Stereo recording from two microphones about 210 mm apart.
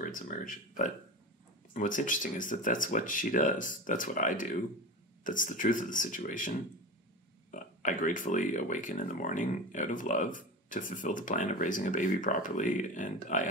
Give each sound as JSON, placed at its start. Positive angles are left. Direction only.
{"t": 0.0, "sound": "speech", "side_deg": 40}
{"t": 7.5, "sound": "speech", "side_deg": 40}